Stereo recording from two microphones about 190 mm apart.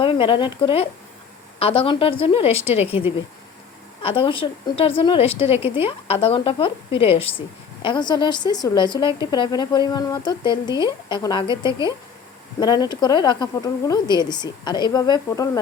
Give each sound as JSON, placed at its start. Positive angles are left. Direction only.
{"t": 0.0, "sound": "a woman's voice", "side_deg": 25}
{"t": 4.0, "sound": "speech", "side_deg": 25}
{"t": 12.5, "sound": "speech", "side_deg": 20}